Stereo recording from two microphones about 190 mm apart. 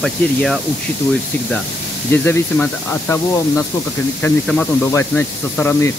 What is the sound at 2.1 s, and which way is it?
Speech, 10° left (ahead or behind).